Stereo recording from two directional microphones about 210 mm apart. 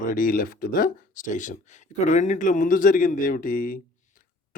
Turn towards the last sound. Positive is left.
turn(degrees=40)  # may be behind; listen again after turning